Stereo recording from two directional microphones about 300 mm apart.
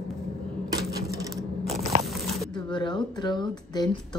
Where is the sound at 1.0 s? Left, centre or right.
Centre.